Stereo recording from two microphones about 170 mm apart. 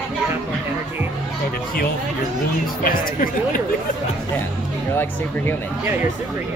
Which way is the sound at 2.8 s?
55° left (ahead or behind).